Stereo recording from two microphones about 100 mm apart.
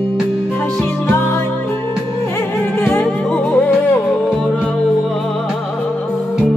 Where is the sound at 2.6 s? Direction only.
20° left (ahead or behind).